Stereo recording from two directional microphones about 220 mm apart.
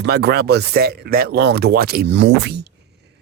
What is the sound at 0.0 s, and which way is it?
Speech, 50° right (ahead or behind).